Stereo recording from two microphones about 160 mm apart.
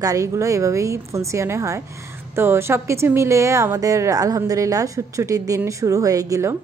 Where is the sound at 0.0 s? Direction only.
20° right (ahead or behind).